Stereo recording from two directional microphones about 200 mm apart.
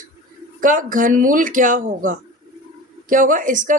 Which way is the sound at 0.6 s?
40° right (ahead or behind).